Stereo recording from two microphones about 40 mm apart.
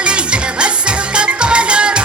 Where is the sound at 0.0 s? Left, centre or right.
Right.